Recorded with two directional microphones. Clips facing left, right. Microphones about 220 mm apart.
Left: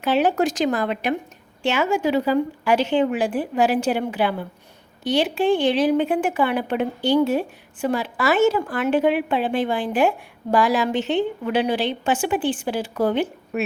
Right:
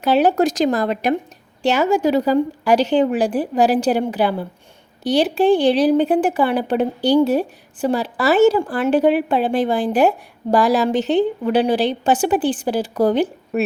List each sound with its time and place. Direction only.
0.0 s speech: 40° right (ahead or behind)